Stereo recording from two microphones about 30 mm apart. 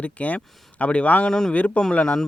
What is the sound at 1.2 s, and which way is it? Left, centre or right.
Speech, left.